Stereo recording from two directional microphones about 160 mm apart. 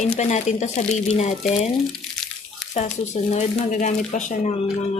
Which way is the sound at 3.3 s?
50° left (ahead or behind).